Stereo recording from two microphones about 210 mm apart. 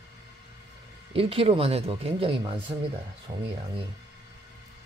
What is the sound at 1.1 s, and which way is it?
Speech, 25° right (ahead or behind).